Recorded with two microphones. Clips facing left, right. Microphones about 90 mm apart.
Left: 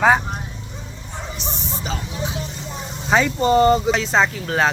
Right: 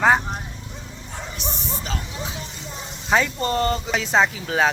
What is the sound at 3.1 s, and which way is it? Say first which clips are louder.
Speech: left 2 dB; centre (ahead or behind).